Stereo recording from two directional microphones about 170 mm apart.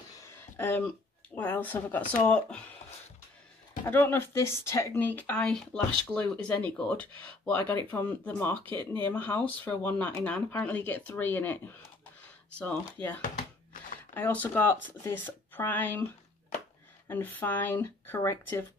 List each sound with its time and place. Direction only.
0.3 s a sound: 10° left (ahead or behind)
1.3 s speech: 10° left (ahead or behind)
3.8 s speech: 10° left (ahead or behind)
13.2 s a sound: 50° left (ahead or behind)
14.1 s speech: 10° left (ahead or behind)
17.1 s speech: 10° left (ahead or behind)